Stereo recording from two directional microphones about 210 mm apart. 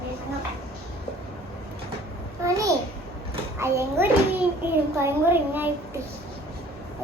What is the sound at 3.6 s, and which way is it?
A child's voice, 15° right (ahead or behind).